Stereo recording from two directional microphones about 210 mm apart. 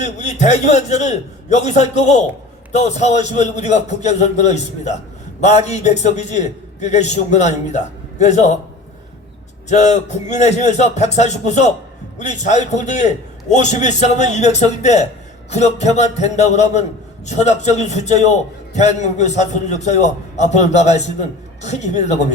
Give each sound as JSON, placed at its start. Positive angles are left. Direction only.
{"t": 0.0, "sound": "a man's voice", "side_deg": 35}
{"t": 9.6, "sound": "a man's voice", "side_deg": 35}